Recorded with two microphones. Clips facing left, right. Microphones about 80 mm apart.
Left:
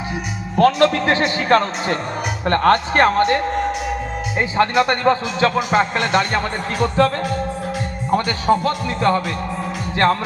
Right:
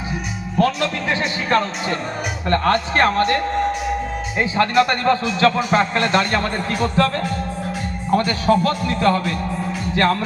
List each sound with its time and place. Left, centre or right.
0.6 s a man's voice: left
2.9 s a man's voice: left
9.9 s music: left